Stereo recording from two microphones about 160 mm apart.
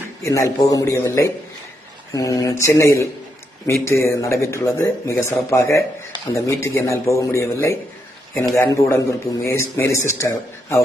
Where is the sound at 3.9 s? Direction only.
20° left (ahead or behind).